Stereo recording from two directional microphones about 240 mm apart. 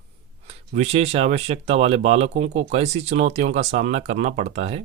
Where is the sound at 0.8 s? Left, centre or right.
Right.